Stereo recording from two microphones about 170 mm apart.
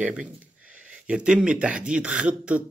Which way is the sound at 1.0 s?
5° right (ahead or behind).